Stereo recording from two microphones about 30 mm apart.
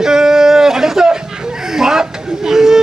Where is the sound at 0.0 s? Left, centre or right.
Centre.